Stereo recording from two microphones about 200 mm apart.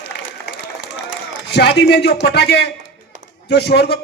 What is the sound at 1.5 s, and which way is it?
A man's voice, 60° left (ahead or behind).